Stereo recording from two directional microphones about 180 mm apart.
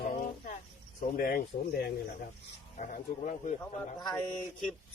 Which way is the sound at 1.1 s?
55° left (ahead or behind).